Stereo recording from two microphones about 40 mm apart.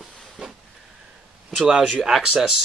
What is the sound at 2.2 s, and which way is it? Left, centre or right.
Speech, centre.